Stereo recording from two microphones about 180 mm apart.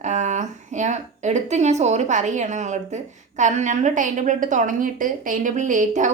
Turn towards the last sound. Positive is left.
turn(degrees=-40)  # may be behind; listen again after turning